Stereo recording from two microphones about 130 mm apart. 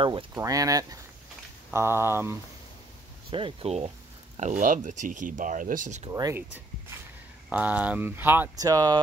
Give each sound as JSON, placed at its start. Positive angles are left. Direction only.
{"t": 0.3, "sound": "speech", "side_deg": -25}
{"t": 3.3, "sound": "speech", "side_deg": -45}
{"t": 4.4, "sound": "speech", "side_deg": -75}
{"t": 6.0, "sound": "speech", "side_deg": -30}
{"t": 6.3, "sound": "speech", "side_deg": -15}
{"t": 8.5, "sound": "speech", "side_deg": -25}